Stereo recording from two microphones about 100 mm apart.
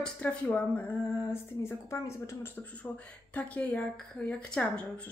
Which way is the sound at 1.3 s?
25° left (ahead or behind).